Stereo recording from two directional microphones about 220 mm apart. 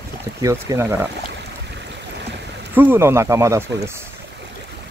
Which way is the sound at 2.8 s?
10° right (ahead or behind).